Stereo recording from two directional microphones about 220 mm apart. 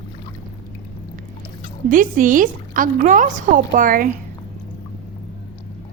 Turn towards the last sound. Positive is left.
turn(degrees=-40)  # may be behind; listen again after turning